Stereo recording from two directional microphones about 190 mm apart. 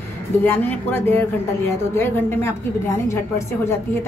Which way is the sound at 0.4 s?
10° left (ahead or behind).